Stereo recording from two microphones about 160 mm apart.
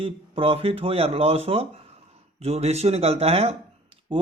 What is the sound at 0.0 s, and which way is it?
A man's voice, 35° right (ahead or behind).